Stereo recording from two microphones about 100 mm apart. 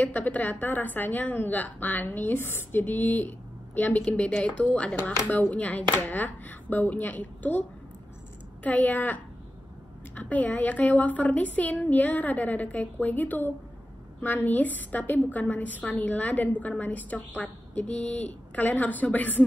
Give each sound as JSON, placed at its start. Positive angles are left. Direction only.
{"t": 0.0, "sound": "a woman's voice", "side_deg": 15}
{"t": 8.6, "sound": "a woman's voice", "side_deg": 15}